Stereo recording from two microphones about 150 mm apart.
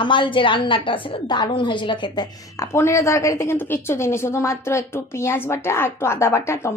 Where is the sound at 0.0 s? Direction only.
30° left (ahead or behind).